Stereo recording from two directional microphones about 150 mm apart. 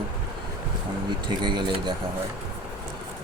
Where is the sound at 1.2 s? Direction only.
30° right (ahead or behind).